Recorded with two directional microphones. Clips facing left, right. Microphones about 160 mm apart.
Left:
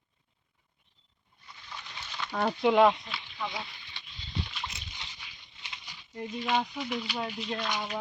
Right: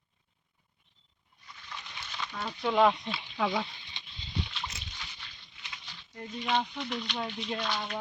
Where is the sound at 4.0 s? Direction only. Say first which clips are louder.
Even; 20° right (ahead or behind).